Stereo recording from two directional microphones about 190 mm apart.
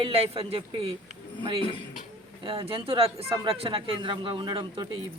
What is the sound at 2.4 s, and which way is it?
Speech, 30° right (ahead or behind).